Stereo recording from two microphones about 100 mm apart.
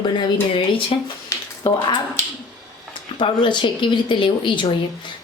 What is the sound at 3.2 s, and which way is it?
Speech, 50° left (ahead or behind).